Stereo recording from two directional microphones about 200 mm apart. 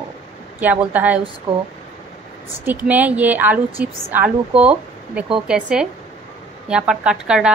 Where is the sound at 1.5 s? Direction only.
30° right (ahead or behind).